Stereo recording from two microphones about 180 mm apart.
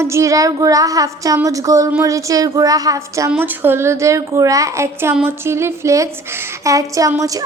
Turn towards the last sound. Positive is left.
turn(degrees=-20)  # may be behind; listen again after turning